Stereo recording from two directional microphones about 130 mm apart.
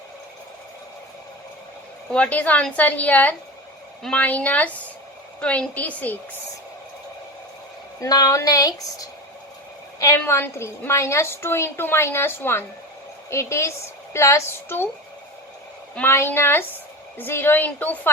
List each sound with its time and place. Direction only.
2.1 s a woman's voice: 10° left (ahead or behind)
8.0 s a woman's voice: 25° left (ahead or behind)
10.2 s a woman's voice: 15° left (ahead or behind)
16.0 s a woman's voice: 15° left (ahead or behind)